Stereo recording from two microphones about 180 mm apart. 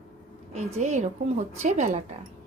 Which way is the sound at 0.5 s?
40° right (ahead or behind).